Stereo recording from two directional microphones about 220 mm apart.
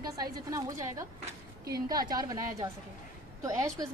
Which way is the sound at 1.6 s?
45° right (ahead or behind).